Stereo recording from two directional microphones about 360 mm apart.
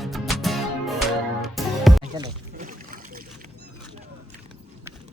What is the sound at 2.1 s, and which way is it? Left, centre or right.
Boat, centre.